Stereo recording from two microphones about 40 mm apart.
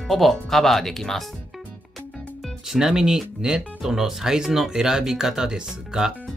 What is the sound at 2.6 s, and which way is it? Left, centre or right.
Speech, centre.